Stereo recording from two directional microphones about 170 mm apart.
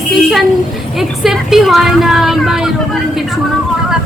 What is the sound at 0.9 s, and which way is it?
Music, centre (ahead or behind).